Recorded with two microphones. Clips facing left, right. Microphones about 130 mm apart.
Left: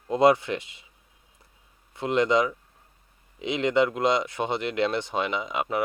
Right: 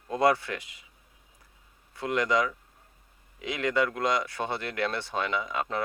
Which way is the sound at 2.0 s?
25° left (ahead or behind).